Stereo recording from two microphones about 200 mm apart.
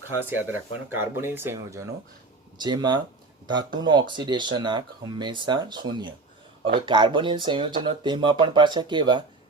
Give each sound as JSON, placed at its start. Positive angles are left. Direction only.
{"t": 0.3, "sound": "speech", "side_deg": -10}